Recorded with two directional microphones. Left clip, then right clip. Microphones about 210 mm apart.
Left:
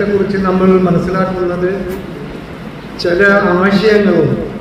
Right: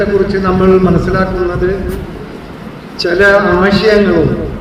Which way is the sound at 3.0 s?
50° right (ahead or behind).